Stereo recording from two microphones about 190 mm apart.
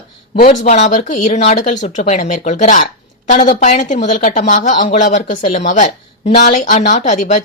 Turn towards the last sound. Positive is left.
turn(degrees=40)  # may be behind; listen again after turning